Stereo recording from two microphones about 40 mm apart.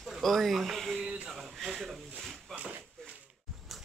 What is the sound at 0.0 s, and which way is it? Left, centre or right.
Speech, centre.